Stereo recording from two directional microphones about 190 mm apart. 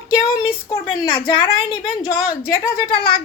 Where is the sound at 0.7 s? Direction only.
25° left (ahead or behind).